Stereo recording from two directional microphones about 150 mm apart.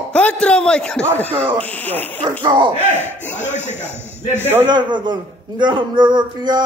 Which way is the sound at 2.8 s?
15° right (ahead or behind).